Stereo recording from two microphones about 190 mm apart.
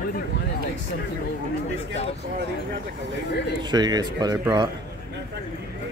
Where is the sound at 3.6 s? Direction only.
20° right (ahead or behind).